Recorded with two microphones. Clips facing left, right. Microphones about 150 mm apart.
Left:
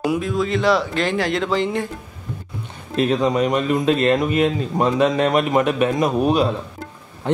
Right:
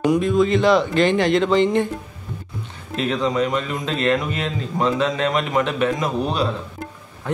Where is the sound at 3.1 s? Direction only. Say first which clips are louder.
Left 1 dB; 15° left (ahead or behind).